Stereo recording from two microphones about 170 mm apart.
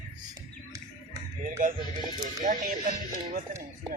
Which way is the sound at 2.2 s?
50° right (ahead or behind).